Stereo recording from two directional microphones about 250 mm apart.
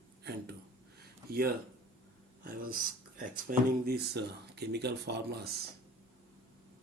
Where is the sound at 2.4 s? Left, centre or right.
Right.